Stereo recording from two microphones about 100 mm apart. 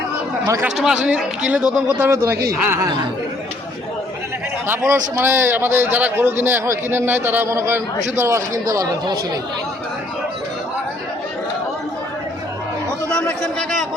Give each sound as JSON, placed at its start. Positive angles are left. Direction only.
{"t": 1.0, "sound": "speech", "side_deg": -15}
{"t": 2.0, "sound": "a man's voice", "side_deg": -25}
{"t": 4.6, "sound": "a man's voice", "side_deg": -30}